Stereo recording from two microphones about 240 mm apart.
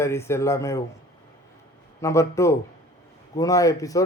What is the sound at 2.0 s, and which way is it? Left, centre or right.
A man's voice, centre.